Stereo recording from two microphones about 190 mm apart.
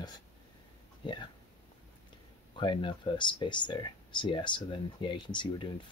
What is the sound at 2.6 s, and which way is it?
Speech, 25° left (ahead or behind).